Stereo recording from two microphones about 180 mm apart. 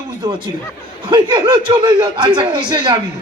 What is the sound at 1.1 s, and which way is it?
Speech, 25° right (ahead or behind).